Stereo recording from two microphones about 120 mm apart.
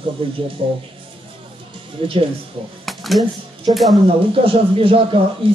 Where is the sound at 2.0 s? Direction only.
45° right (ahead or behind).